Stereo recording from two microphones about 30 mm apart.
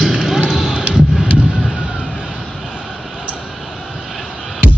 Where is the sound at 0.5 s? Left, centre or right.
Centre.